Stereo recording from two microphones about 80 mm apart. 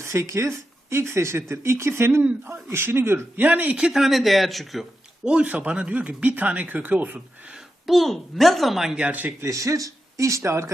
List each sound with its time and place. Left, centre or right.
0.0 s speech: right; by 4.9 s centre
5.2 s speech: centre
7.5 s a woman's voice: centre
9.0 s speech: right
9.4 s speech: right